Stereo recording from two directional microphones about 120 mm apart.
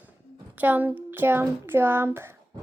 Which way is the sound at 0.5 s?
15° right (ahead or behind).